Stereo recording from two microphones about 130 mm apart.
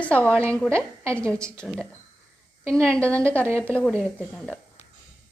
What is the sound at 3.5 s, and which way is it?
Speech, 20° right (ahead or behind).